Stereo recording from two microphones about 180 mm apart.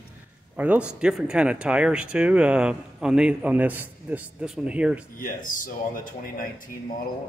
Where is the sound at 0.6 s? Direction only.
5° right (ahead or behind).